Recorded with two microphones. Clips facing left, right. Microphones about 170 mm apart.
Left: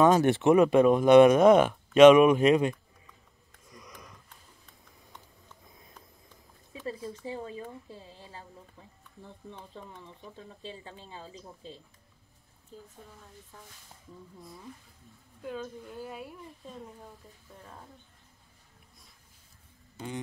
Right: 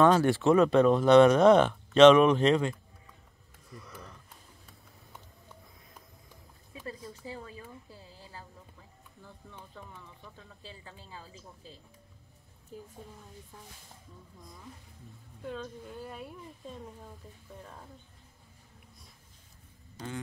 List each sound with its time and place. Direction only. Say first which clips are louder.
0.0 s speech: left 1 dB; 15° left (ahead or behind)
3.7 s a sound: right 3 dB; 15° left (ahead or behind)
6.7 s a sound: left 5 dB; 30° left (ahead or behind)
7.2 s a woman's voice: left 5 dB; 25° left (ahead or behind)
10.0 s a woman's voice: left 5 dB; 25° left (ahead or behind)
12.7 s a woman's voice: right 3 dB; 10° right (ahead or behind)
15.4 s speech: left 1 dB; 5° left (ahead or behind)